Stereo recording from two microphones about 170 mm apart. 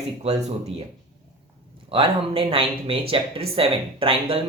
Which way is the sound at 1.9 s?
30° right (ahead or behind).